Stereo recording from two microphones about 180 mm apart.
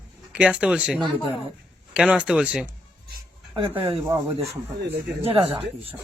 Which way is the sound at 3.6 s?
25° right (ahead or behind).